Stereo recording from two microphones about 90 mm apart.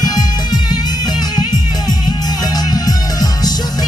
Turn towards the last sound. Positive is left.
turn(degrees=45)  # may be behind; listen again after turning